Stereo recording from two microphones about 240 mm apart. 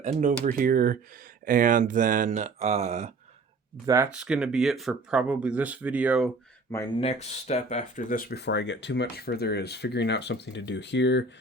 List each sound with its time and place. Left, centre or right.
0.0 s speech: right
3.8 s speech: centre
7.0 s speech: left